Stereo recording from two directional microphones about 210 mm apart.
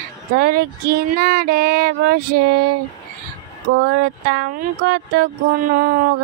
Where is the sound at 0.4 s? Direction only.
45° right (ahead or behind).